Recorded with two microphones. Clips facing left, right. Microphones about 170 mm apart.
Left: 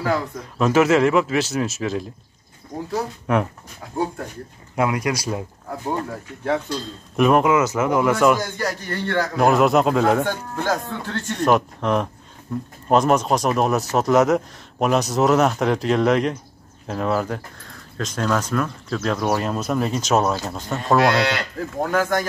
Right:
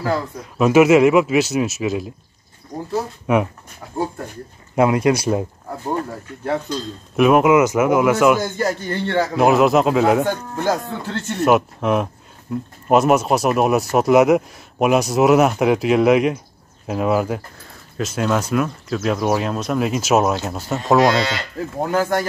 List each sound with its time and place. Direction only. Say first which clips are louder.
0.0 s speech: right 1 dB; 10° right (ahead or behind)
4.7 s a man's voice: right 6 dB; 25° right (ahead or behind)
7.2 s speech: right 3 dB; 5° right (ahead or behind)
8.5 s a man's voice: right 4 dB; 25° right (ahead or behind)
9.3 s speech: right 2 dB; 5° right (ahead or behind)